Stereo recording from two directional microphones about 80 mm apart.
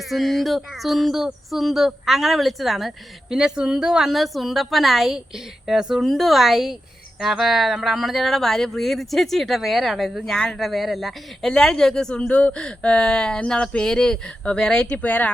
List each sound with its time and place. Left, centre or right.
0.1 s speech: centre
10.3 s speech: centre
10.6 s speech: centre